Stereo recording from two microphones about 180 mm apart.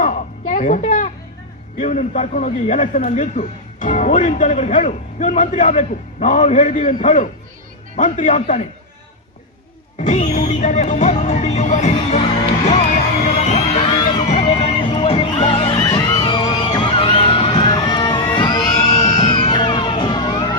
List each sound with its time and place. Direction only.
0.0 s a sound: 45° left (ahead or behind)
1.8 s a man's voice: 40° left (ahead or behind)
10.0 s speech: 40° left (ahead or behind)
12.6 s music: 40° left (ahead or behind)
15.8 s music: 20° left (ahead or behind)
19.0 s music: 40° left (ahead or behind)
19.3 s music: 25° left (ahead or behind)